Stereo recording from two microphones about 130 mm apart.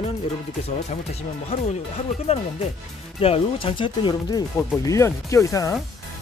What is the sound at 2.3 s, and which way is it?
Speech, 55° left (ahead or behind).